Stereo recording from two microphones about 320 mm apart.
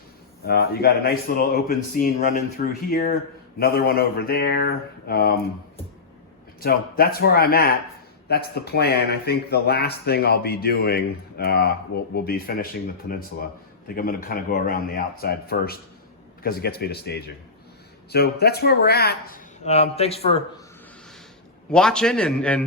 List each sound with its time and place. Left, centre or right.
0.4 s speech: left
6.6 s speech: left
13.8 s speech: left
21.7 s a man's voice: centre